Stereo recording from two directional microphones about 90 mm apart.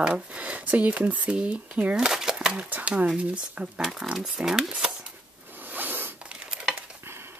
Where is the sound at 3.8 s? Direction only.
Centre (ahead or behind).